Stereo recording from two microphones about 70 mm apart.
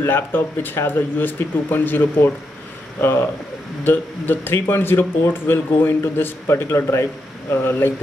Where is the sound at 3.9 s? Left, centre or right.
Left.